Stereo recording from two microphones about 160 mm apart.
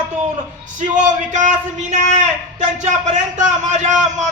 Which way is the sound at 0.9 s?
50° right (ahead or behind).